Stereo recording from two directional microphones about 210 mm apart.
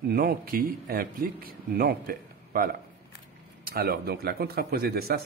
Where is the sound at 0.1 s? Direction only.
45° right (ahead or behind).